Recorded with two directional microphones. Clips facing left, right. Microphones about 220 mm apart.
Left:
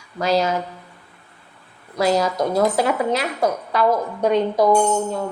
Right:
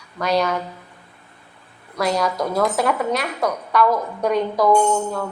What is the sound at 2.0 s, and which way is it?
Speech, 25° left (ahead or behind).